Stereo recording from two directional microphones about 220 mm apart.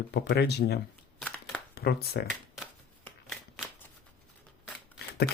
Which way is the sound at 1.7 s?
45° left (ahead or behind).